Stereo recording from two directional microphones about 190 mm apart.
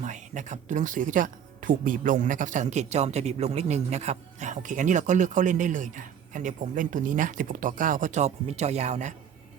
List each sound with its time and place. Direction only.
0.0 s speech: 40° right (ahead or behind)